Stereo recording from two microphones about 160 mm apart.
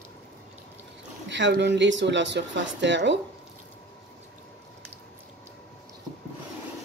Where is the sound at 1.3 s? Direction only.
90° right.